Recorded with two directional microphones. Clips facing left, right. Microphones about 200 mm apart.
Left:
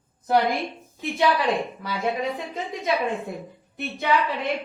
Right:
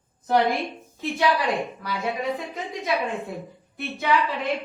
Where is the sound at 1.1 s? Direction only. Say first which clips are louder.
Left 1 dB; centre (ahead or behind).